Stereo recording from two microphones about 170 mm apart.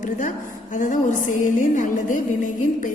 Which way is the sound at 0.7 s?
50° left (ahead or behind).